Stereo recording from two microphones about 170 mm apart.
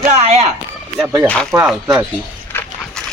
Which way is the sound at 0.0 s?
40° right (ahead or behind).